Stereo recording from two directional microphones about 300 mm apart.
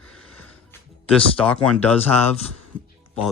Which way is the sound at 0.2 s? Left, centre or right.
Left.